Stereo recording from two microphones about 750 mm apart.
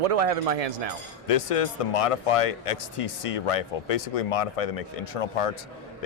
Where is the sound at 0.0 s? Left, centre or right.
Right.